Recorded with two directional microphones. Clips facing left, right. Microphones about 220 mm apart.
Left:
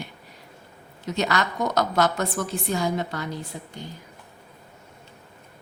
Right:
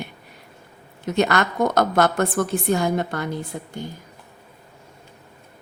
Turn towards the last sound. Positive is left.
turn(degrees=-55)  # may be behind; listen again after turning